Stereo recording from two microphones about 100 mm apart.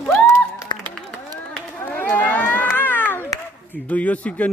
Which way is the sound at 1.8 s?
20° left (ahead or behind).